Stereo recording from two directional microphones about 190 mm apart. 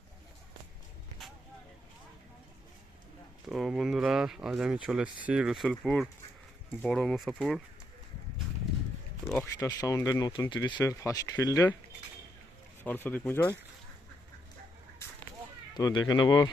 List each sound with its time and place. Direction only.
3.4 s speech: centre (ahead or behind)
9.4 s speech: 15° left (ahead or behind)
12.8 s speech: 10° left (ahead or behind)
15.7 s speech: 20° left (ahead or behind)